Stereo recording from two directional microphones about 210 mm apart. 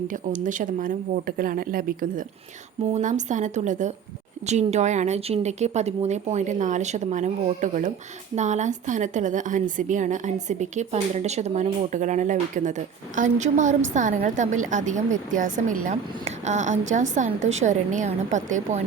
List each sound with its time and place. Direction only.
0.1 s a woman's voice: 40° right (ahead or behind)